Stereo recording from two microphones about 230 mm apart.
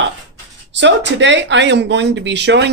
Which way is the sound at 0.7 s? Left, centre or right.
Right.